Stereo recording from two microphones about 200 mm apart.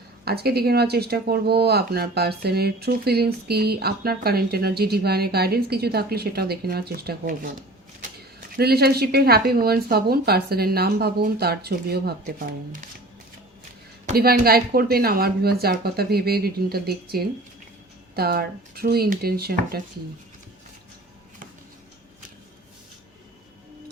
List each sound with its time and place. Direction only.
0.3 s speech: 50° right (ahead or behind)
8.5 s speech: 50° right (ahead or behind)
14.2 s speech: 50° right (ahead or behind)